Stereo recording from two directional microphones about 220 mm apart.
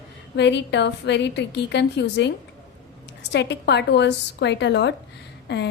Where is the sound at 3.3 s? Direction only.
50° left (ahead or behind).